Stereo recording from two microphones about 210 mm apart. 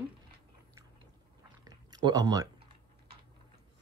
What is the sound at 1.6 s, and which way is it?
Typing, 20° right (ahead or behind).